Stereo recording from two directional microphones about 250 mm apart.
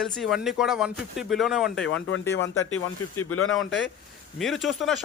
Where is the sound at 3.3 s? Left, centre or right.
Left.